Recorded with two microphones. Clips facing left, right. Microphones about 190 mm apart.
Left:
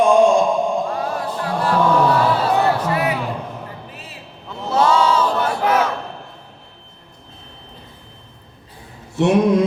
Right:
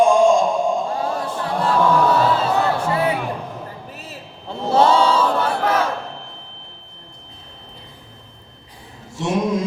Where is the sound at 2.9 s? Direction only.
30° right (ahead or behind).